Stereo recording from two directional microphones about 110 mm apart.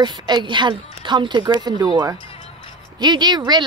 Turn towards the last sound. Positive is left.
turn(degrees=-40)  # may be behind; listen again after turning